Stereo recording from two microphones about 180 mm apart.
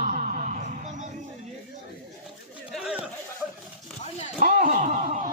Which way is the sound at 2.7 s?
Centre (ahead or behind).